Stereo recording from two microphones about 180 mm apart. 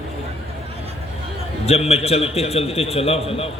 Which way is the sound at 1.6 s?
35° left (ahead or behind).